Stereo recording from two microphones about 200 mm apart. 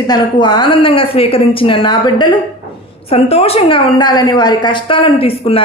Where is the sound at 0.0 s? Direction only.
20° left (ahead or behind).